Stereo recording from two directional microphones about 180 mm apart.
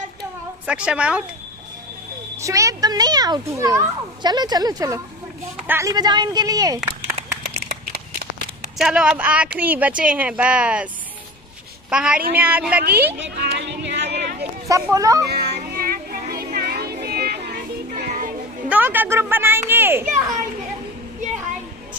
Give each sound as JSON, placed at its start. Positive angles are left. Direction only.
{"t": 0.7, "sound": "speech", "side_deg": -5}
{"t": 2.4, "sound": "a child's voice", "side_deg": -15}
{"t": 7.6, "sound": "a sound", "side_deg": -60}
{"t": 8.7, "sound": "a woman's voice", "side_deg": -5}
{"t": 11.9, "sound": "a woman's voice", "side_deg": -5}
{"t": 13.2, "sound": "a sound", "side_deg": -70}
{"t": 14.7, "sound": "a child's voice", "side_deg": -20}
{"t": 15.2, "sound": "music", "side_deg": -65}
{"t": 18.7, "sound": "a woman's voice", "side_deg": -10}